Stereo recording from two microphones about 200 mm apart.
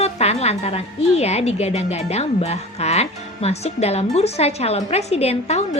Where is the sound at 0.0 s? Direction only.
30° left (ahead or behind).